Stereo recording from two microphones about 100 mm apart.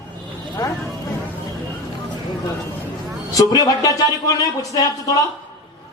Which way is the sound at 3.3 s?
35° left (ahead or behind).